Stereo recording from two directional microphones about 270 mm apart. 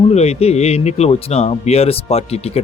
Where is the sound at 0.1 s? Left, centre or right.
Left.